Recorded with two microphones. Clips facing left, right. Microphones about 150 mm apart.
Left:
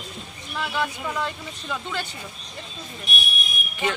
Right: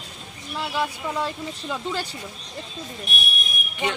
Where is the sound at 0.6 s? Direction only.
30° right (ahead or behind).